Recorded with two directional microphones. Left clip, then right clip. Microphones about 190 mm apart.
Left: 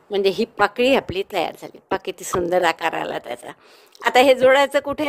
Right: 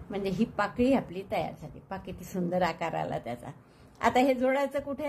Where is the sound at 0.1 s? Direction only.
45° left (ahead or behind).